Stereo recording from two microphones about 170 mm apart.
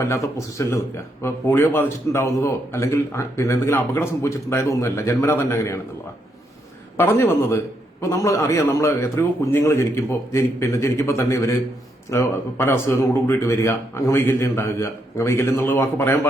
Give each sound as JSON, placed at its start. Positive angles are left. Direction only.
{"t": 0.0, "sound": "speech", "side_deg": 15}
{"t": 6.9, "sound": "speech", "side_deg": 15}